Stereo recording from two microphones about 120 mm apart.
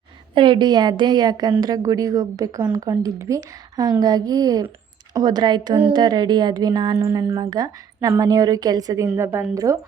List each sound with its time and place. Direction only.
0.3 s a woman's voice: 45° right (ahead or behind); by 9.7 s 25° right (ahead or behind)